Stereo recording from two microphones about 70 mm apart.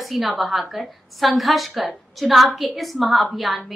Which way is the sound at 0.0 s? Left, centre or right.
Centre.